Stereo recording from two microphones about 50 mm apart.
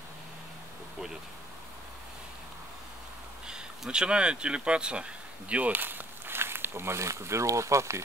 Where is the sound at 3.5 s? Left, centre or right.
Centre.